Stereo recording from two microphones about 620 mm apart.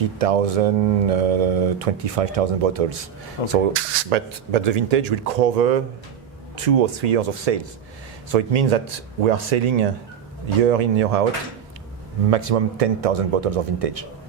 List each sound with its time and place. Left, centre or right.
0.2 s speech: right
3.4 s speech: right
12.3 s speech: right